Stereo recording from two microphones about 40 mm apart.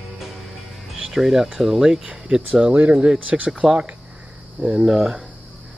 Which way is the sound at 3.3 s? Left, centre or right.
Right.